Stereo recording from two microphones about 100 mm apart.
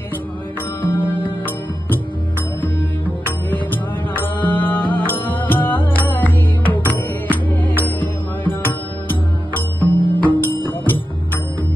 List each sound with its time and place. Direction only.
0.8 s music: 20° left (ahead or behind)
2.6 s music: 20° left (ahead or behind)